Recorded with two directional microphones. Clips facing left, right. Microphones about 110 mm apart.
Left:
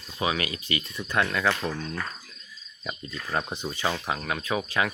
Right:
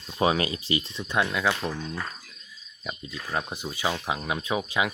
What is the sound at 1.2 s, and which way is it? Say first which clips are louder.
Speech: even; 10° right (ahead or behind).